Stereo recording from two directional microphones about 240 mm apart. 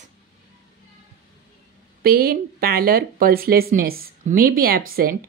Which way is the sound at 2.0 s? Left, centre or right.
Right.